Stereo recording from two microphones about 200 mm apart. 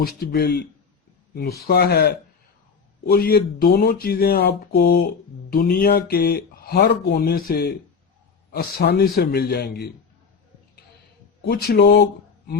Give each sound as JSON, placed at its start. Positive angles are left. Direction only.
{"t": 0.0, "sound": "speech", "side_deg": 50}
{"t": 11.4, "sound": "speech", "side_deg": 50}